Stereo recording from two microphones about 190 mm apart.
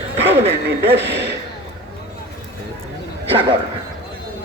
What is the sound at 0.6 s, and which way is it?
Speech, 65° right (ahead or behind).